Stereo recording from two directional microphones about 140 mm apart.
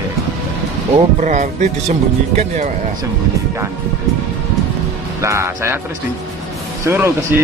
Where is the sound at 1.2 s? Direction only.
60° right (ahead or behind).